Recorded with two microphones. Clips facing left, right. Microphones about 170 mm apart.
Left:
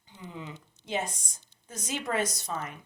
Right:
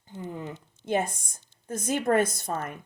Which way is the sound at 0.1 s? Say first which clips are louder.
Right 6 dB; 50° right (ahead or behind).